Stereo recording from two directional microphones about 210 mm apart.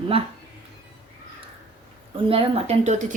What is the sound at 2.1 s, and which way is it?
A woman's voice, 25° right (ahead or behind).